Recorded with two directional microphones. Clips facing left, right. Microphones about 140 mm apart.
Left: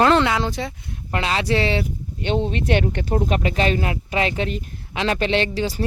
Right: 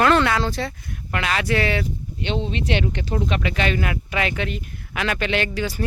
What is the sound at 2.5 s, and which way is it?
Speech, 50° left (ahead or behind).